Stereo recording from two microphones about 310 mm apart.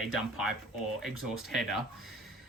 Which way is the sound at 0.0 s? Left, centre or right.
Centre.